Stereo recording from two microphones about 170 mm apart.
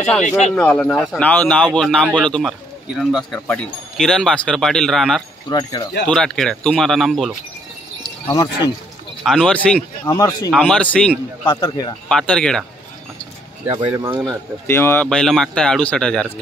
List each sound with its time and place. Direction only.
0.6 s speech: 5° left (ahead or behind)
5.5 s speech: 25° left (ahead or behind)
6.0 s speech: 5° left (ahead or behind)
8.3 s speech: 25° left (ahead or behind)
9.2 s speech: centre (ahead or behind)
10.0 s speech: 20° left (ahead or behind)
10.5 s speech: 5° left (ahead or behind)
11.4 s speech: 25° left (ahead or behind)
12.1 s speech: 5° left (ahead or behind)
13.7 s speech: 25° right (ahead or behind)
14.7 s speech: 15° left (ahead or behind)